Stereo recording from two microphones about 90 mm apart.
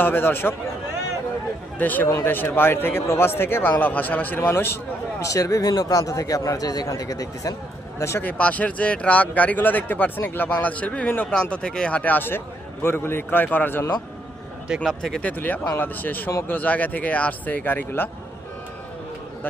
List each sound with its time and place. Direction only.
0.0 s a man's voice: 20° left (ahead or behind)
1.8 s a man's voice: 20° left (ahead or behind)
5.2 s speech: 40° left (ahead or behind)
8.2 s a man's voice: 15° left (ahead or behind)
14.8 s speech: centre (ahead or behind)
15.2 s a man's voice: 20° left (ahead or behind)